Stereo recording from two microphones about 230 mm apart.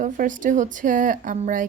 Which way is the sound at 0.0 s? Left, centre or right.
Right.